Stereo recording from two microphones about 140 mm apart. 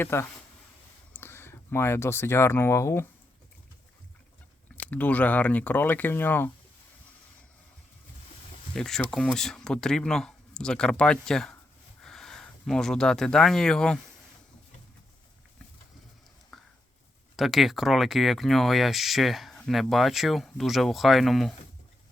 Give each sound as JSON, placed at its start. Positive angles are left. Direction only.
{"t": 0.0, "sound": "speech", "side_deg": 15}
{"t": 4.9, "sound": "speech", "side_deg": 10}
{"t": 8.7, "sound": "speech", "side_deg": 5}
{"t": 16.5, "sound": "a sound", "side_deg": 0}
{"t": 17.3, "sound": "speech", "side_deg": 0}